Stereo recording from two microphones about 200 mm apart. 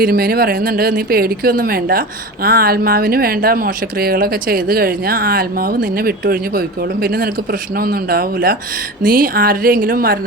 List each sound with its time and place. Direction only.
0.0 s speech: 50° right (ahead or behind)